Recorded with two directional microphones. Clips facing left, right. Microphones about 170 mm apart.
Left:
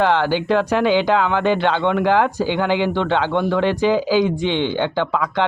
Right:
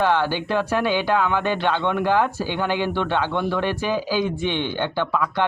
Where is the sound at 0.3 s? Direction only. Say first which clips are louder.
Left 5 dB; 15° left (ahead or behind).